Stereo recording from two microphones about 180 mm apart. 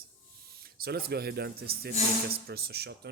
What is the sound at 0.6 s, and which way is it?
Speech, 60° right (ahead or behind).